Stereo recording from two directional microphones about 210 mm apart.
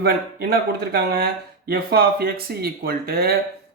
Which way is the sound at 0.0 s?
50° right (ahead or behind).